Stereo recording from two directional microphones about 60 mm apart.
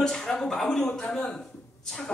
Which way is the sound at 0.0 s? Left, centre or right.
Centre.